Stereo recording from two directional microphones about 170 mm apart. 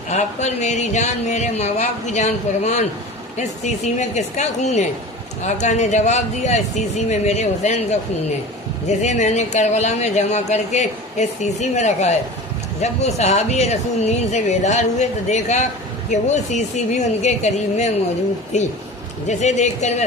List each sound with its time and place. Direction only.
0.1 s speech: 40° left (ahead or behind)